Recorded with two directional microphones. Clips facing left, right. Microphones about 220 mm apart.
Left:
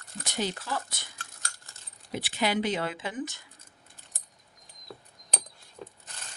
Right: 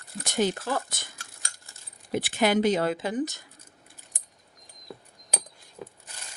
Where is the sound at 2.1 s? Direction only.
50° right (ahead or behind).